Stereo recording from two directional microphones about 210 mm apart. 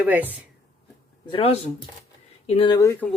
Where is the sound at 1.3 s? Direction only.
25° left (ahead or behind).